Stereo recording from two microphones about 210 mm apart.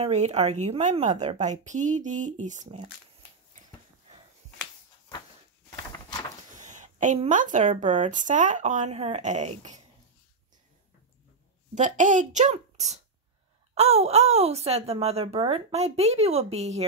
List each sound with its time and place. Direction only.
0.0 s speech: 30° right (ahead or behind)
6.5 s speech: 35° right (ahead or behind)
11.7 s speech: 35° right (ahead or behind)